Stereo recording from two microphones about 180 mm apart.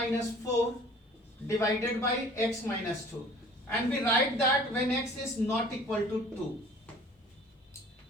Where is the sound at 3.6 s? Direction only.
5° left (ahead or behind).